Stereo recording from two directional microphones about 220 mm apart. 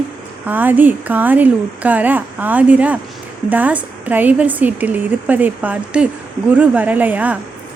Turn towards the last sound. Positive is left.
turn(degrees=-5)  # may be behind; listen again after turning